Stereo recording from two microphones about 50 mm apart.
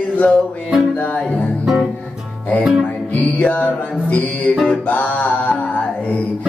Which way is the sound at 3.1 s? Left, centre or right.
Left.